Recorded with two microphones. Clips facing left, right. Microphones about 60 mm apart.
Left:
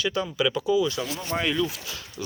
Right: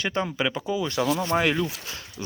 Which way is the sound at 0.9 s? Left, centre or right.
Right.